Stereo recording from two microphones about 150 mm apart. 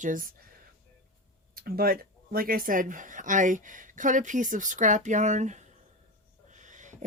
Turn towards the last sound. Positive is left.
turn(degrees=-55)  # may be behind; listen again after turning